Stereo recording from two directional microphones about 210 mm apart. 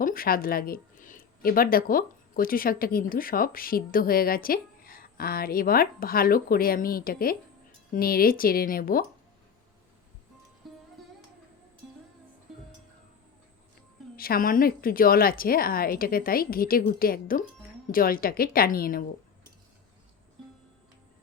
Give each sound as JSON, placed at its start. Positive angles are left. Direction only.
{"t": 0.0, "sound": "speech", "side_deg": 45}
{"t": 10.6, "sound": "music", "side_deg": 0}
{"t": 14.2, "sound": "speech", "side_deg": 45}